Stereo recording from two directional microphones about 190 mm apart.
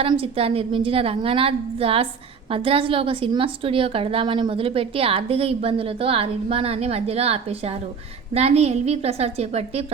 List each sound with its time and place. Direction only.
0.0 s a woman's voice: 30° right (ahead or behind)